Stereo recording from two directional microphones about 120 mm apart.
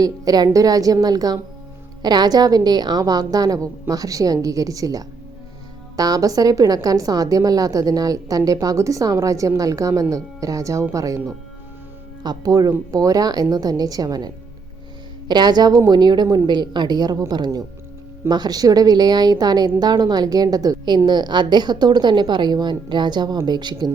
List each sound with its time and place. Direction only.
0.0 s a woman's voice: 30° right (ahead or behind)
12.2 s a woman's voice: 35° right (ahead or behind)